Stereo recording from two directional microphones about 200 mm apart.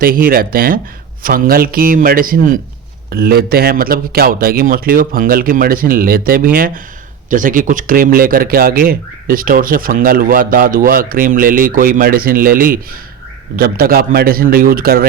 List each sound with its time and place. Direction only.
0.0 s speech: 45° right (ahead or behind)